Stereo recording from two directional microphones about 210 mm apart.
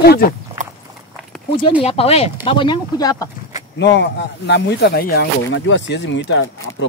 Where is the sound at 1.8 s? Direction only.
30° left (ahead or behind).